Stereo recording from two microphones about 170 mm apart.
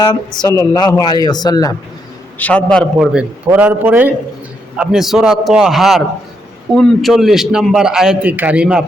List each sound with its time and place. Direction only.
0.4 s a man's voice: 20° left (ahead or behind)
2.4 s a man's voice: 10° left (ahead or behind)